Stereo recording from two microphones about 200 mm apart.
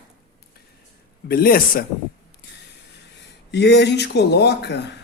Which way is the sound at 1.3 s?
50° left (ahead or behind).